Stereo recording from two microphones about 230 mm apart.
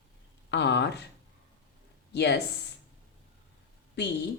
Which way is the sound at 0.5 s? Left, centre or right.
Left.